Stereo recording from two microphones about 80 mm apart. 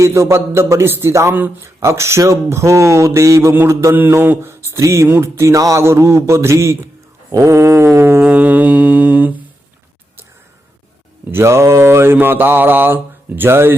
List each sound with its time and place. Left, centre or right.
0.0 s a sound: right
7.3 s mantra: right; by 9.4 s centre
11.3 s mantra: right